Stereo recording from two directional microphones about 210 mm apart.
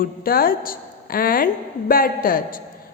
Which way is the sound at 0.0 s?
45° left (ahead or behind).